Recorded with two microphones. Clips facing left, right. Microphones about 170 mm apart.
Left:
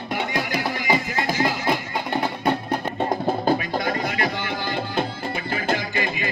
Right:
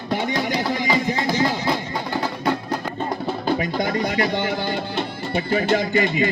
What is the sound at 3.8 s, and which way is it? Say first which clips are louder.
Music: right 3 dB; 25° right (ahead or behind).